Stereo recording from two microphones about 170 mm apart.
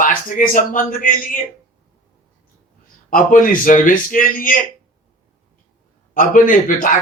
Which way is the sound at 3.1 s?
55° left (ahead or behind).